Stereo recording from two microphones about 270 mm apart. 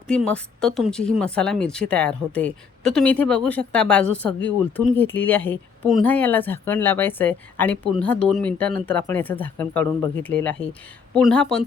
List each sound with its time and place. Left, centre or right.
0.1 s speech: centre